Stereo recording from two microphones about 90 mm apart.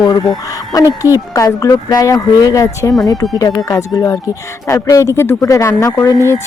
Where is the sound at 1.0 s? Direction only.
40° left (ahead or behind).